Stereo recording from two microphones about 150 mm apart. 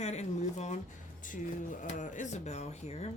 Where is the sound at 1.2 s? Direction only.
60° left (ahead or behind).